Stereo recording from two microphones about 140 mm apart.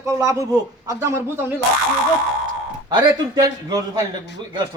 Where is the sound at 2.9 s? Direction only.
30° right (ahead or behind).